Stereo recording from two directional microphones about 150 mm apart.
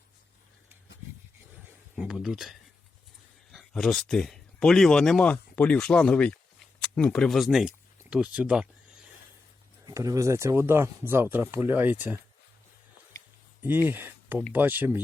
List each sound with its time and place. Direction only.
2.0 s speech: 5° right (ahead or behind)
9.8 s speech: 20° right (ahead or behind)
13.8 s speech: 15° right (ahead or behind)